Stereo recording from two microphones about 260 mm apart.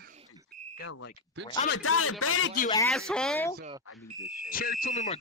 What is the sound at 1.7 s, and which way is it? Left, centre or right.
Speech, left.